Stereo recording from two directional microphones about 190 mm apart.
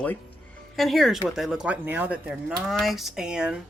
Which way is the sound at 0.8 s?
Centre (ahead or behind).